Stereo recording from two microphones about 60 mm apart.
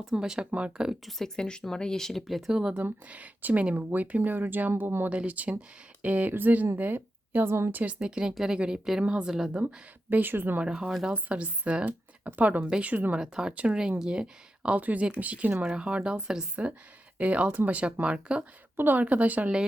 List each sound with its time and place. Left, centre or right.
0.0 s speech: centre
0.5 s speech: right
1.4 s speech: centre
2.5 s speech: centre
2.7 s speech: right
5.0 s a woman's voice: right
7.7 s speech: right
7.9 s speech: centre
9.5 s speech: centre
10.1 s speech: right
10.6 s speech: centre
13.1 s speech: centre
13.5 s speech: right